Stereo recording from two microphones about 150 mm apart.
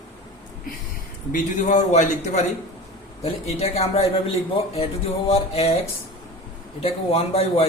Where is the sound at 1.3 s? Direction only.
55° left (ahead or behind).